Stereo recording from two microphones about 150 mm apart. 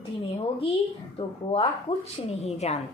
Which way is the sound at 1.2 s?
40° left (ahead or behind).